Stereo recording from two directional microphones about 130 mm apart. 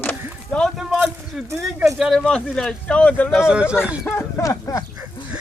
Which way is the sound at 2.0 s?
Centre (ahead or behind).